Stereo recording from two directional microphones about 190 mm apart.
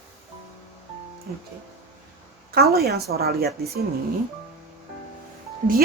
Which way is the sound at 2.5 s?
55° right (ahead or behind).